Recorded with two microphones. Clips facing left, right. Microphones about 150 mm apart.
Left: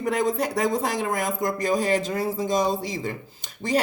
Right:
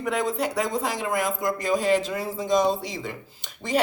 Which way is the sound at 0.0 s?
45° left (ahead or behind).